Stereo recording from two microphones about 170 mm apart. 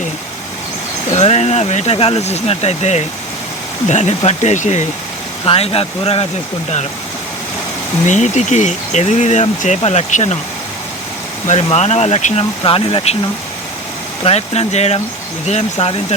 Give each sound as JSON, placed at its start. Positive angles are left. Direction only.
{"t": 1.1, "sound": "speech", "side_deg": 40}
{"t": 8.0, "sound": "speech", "side_deg": 45}
{"t": 11.4, "sound": "speech", "side_deg": 40}
{"t": 14.3, "sound": "speech", "side_deg": 35}